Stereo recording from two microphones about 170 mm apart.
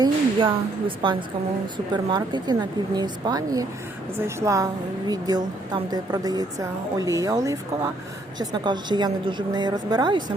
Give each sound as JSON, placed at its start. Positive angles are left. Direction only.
{"t": 0.0, "sound": "a woman's voice", "side_deg": -30}